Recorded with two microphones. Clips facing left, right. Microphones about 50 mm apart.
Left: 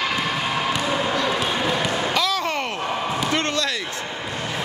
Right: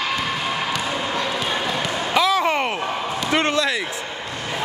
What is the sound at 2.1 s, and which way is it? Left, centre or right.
Slam, centre.